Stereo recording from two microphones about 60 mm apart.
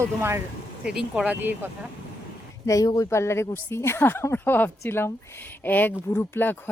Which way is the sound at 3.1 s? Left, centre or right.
Left.